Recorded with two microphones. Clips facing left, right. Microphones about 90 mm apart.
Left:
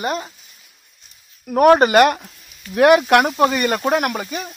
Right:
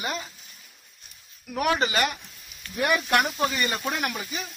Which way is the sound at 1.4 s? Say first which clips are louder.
Left 13 dB; 50° left (ahead or behind).